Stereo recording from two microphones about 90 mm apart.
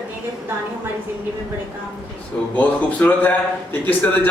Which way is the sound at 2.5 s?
15° left (ahead or behind).